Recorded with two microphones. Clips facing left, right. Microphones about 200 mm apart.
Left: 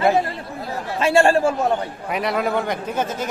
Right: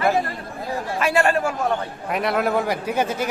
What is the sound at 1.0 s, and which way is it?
Speech, 25° left (ahead or behind).